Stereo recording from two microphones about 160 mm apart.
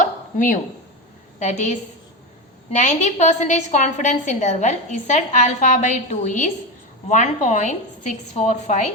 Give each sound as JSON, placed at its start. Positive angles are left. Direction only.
{"t": 0.0, "sound": "hiccup", "side_deg": 55}
{"t": 1.4, "sound": "a woman's voice", "side_deg": 45}